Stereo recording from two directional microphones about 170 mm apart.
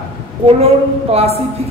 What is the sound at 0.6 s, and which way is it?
Speech, 35° right (ahead or behind).